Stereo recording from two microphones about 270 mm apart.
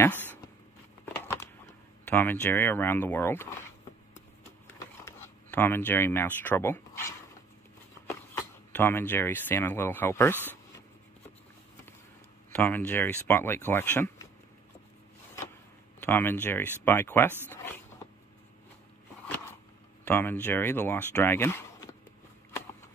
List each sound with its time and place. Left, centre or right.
0.0 s a sound: centre
2.0 s speech: centre
4.7 s speech: centre
12.5 s speech: centre
16.0 s speech: centre
20.1 s speech: centre